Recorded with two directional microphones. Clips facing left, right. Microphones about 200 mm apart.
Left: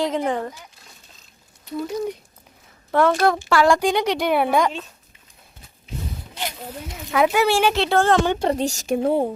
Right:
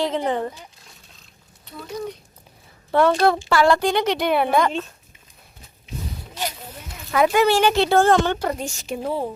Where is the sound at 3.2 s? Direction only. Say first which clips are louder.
Even; 5° right (ahead or behind).